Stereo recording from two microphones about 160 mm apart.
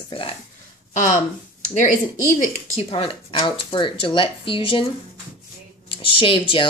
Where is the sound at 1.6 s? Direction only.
50° left (ahead or behind).